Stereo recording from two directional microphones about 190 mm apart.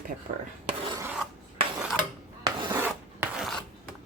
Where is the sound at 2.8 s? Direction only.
10° right (ahead or behind).